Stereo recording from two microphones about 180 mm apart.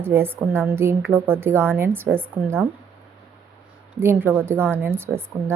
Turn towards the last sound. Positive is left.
turn(degrees=-15)  # may be behind; listen again after turning